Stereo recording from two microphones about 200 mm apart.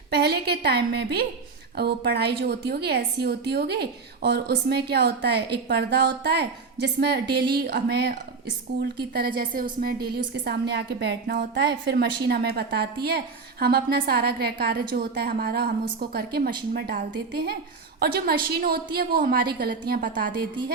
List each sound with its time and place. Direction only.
0.1 s a woman's voice: 50° right (ahead or behind)